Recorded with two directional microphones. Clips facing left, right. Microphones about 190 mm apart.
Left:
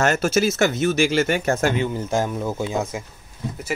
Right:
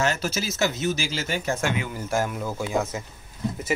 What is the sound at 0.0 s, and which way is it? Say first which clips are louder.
Speech: left 7 dB; 50° left (ahead or behind).